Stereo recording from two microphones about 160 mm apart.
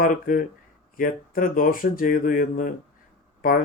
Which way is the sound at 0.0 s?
60° left (ahead or behind).